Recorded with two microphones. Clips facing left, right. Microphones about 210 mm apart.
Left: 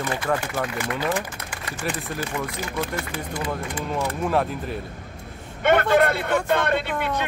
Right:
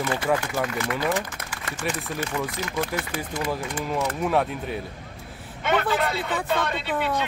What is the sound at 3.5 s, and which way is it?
Speech, centre (ahead or behind).